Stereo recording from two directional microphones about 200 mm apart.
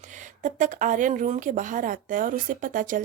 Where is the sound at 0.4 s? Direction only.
40° right (ahead or behind).